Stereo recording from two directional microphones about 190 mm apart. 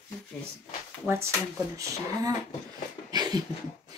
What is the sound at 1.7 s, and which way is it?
Speech, 20° right (ahead or behind).